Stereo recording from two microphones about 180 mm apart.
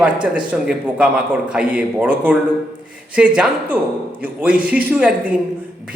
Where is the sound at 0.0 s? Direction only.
5° right (ahead or behind).